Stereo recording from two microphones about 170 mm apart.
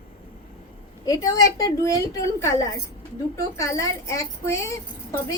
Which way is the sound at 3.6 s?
20° left (ahead or behind).